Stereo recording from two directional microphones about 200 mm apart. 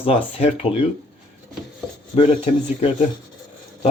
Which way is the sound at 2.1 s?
35° left (ahead or behind).